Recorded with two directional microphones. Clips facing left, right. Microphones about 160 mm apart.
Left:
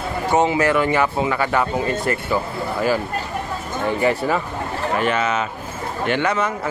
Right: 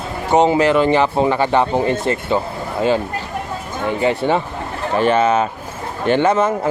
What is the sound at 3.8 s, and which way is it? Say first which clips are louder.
Speech: right 2 dB; 20° right (ahead or behind).